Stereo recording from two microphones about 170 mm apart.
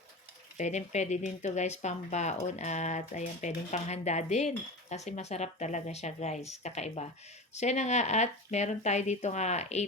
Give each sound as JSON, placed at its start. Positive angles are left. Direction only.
{"t": 0.5, "sound": "speech", "side_deg": 45}